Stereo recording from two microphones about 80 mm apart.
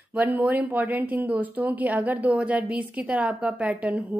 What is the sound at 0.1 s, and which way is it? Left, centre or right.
A woman's voice, centre.